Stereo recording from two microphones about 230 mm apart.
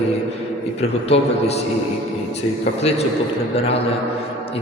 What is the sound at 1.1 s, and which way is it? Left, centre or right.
Speech, left.